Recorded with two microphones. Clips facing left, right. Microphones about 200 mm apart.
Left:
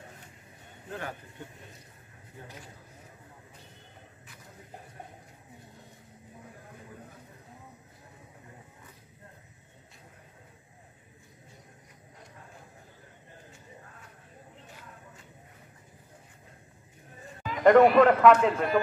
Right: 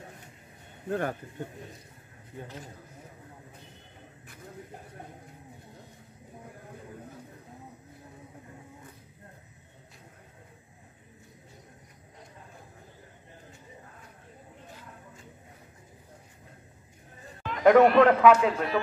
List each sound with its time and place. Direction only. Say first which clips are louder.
0.8 s speech: right 8 dB; 50° right (ahead or behind)
17.4 s a man's voice: even; centre (ahead or behind)